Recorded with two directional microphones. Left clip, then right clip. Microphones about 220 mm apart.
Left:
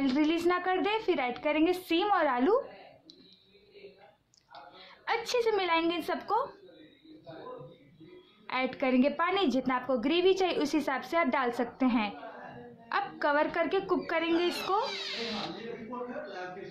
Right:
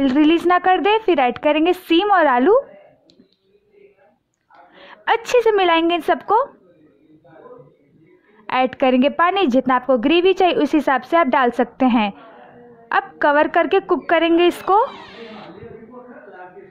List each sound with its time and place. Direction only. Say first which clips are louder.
0.0 s a woman's voice: right 13 dB; 35° right (ahead or behind)
4.7 s a woman's voice: right 13 dB; 35° right (ahead or behind)
8.5 s a woman's voice: right 13 dB; 35° right (ahead or behind)